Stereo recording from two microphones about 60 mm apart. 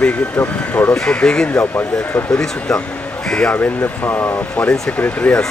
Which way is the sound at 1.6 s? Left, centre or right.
Left.